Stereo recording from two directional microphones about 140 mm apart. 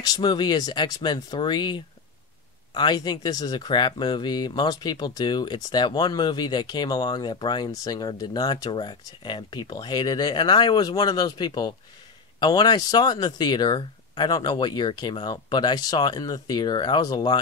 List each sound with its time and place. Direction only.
0.0 s speech: 30° left (ahead or behind)